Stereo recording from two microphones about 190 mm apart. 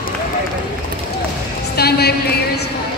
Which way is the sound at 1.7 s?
55° left (ahead or behind).